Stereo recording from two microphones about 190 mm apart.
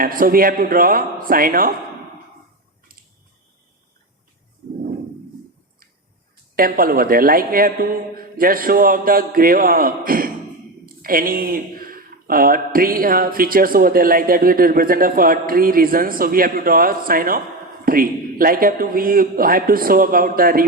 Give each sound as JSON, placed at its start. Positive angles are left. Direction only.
{"t": 0.0, "sound": "speech", "side_deg": -50}
{"t": 6.6, "sound": "speech", "side_deg": -50}